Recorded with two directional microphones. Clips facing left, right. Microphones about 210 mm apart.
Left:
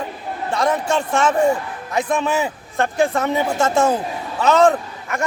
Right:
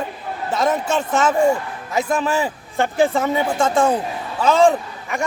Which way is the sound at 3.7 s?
5° left (ahead or behind).